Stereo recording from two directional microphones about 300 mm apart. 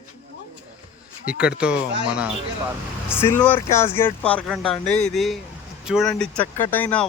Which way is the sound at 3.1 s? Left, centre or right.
Centre.